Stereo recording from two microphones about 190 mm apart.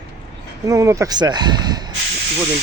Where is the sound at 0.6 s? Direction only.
15° right (ahead or behind).